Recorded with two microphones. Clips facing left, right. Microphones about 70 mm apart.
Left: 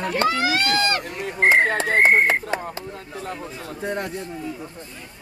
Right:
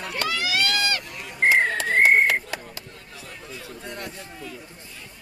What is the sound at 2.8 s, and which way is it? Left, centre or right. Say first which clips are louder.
Speech: left 9 dB; left.